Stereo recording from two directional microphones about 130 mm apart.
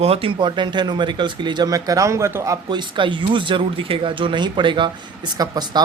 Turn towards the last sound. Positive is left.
turn(degrees=-30)  # may be behind; listen again after turning